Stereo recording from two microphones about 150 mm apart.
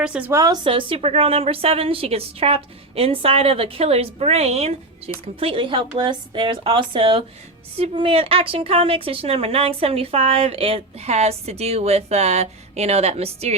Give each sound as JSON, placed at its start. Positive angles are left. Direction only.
{"t": 0.0, "sound": "a woman's voice", "side_deg": -10}
{"t": 0.3, "sound": "a woman's voice", "side_deg": -25}
{"t": 0.6, "sound": "speech", "side_deg": -35}